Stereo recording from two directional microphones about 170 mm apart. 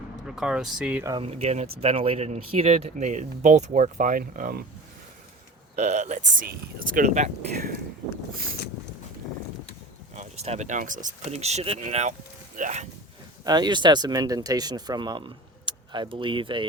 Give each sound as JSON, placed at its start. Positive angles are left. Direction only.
{"t": 0.3, "sound": "speech", "side_deg": -5}
{"t": 1.2, "sound": "speech", "side_deg": -40}
{"t": 5.7, "sound": "speech", "side_deg": -45}
{"t": 10.2, "sound": "speech", "side_deg": -40}
{"t": 13.4, "sound": "speech", "side_deg": -25}